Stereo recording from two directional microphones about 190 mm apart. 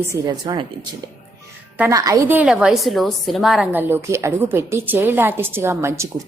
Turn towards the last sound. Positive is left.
turn(degrees=-15)  # may be behind; listen again after turning